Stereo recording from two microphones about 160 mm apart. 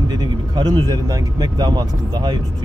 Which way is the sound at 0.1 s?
25° right (ahead or behind).